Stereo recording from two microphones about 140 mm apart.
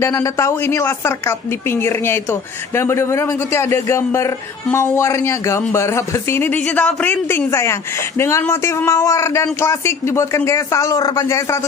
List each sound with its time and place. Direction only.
0.0 s speech: 20° left (ahead or behind)